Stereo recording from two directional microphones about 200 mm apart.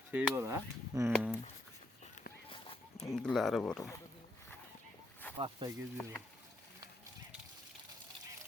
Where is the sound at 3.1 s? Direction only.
Centre (ahead or behind).